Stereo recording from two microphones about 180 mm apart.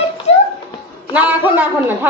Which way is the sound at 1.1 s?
10° right (ahead or behind).